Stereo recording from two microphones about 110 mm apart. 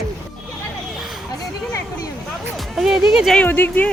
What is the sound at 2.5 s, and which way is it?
Music, 5° right (ahead or behind).